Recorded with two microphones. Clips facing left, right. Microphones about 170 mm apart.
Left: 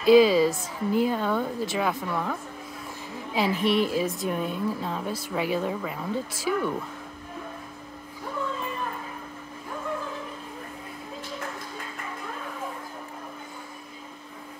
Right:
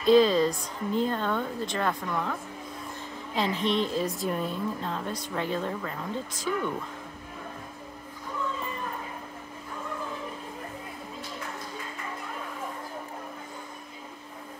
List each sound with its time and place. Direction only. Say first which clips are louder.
0.0 s a woman's voice: left 3 dB; 5° left (ahead or behind)
3.3 s a woman's voice: left 3 dB; 5° left (ahead or behind)